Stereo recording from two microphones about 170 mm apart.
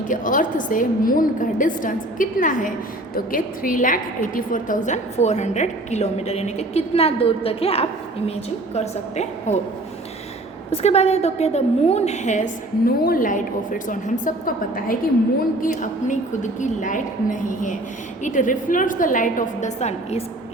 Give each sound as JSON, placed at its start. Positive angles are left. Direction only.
{"t": 0.1, "sound": "a woman's voice", "side_deg": 50}
{"t": 10.7, "sound": "a woman's voice", "side_deg": 40}